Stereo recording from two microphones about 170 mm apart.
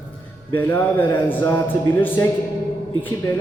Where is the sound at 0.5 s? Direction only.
10° left (ahead or behind).